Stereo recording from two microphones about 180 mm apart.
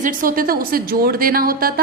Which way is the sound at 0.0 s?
50° right (ahead or behind).